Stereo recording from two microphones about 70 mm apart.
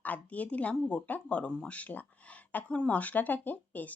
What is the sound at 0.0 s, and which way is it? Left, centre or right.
Speech, left.